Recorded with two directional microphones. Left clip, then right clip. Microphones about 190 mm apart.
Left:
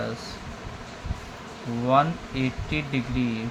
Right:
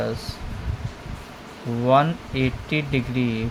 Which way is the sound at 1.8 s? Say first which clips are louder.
Right 3 dB; 35° right (ahead or behind).